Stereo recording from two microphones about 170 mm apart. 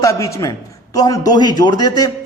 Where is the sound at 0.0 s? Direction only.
20° left (ahead or behind).